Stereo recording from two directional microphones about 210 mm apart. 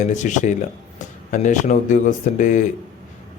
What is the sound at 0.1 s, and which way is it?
Speech, 35° left (ahead or behind).